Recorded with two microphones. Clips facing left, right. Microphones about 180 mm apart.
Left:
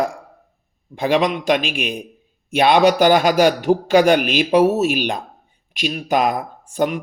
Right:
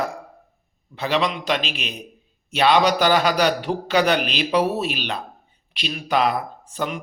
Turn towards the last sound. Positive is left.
turn(degrees=45)  # may be behind; listen again after turning